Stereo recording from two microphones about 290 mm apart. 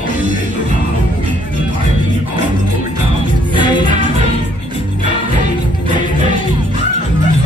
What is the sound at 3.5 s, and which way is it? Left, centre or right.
Music, centre.